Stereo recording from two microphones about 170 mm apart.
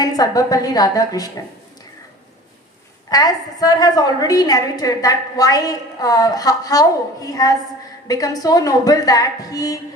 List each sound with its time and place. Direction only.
0.0 s a woman's voice: 20° left (ahead or behind)
3.1 s a woman's voice: 20° left (ahead or behind)